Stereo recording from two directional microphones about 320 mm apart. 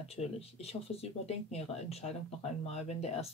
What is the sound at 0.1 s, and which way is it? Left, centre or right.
Speech, centre.